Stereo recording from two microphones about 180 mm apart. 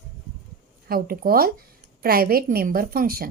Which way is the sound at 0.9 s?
55° right (ahead or behind).